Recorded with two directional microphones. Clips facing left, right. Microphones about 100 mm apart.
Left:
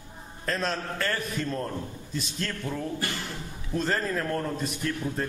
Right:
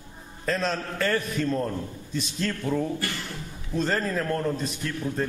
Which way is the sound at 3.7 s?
Centre (ahead or behind).